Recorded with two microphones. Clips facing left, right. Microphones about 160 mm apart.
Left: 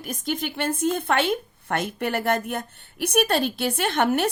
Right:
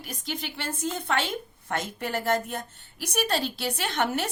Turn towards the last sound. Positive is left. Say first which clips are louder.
# left 6 dB
turn(degrees=55)  # may be behind; listen again after turning